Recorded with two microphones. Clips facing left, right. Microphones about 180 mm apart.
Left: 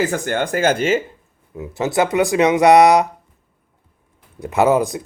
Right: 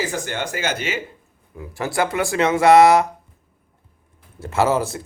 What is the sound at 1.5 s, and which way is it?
Speech, 20° left (ahead or behind).